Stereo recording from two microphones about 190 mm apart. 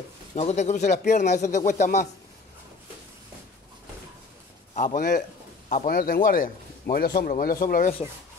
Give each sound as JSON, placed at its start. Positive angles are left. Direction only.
{"t": 0.4, "sound": "speech", "side_deg": 35}
{"t": 4.7, "sound": "speech", "side_deg": 40}